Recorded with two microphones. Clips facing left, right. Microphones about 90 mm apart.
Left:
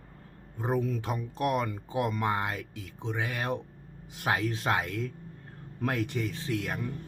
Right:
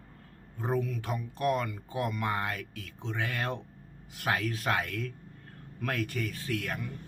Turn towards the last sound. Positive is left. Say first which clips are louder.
# left 2 dB
turn(degrees=25)  # may be behind; listen again after turning